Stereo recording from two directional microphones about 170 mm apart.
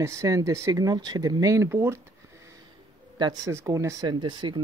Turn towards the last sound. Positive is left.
turn(degrees=-25)  # may be behind; listen again after turning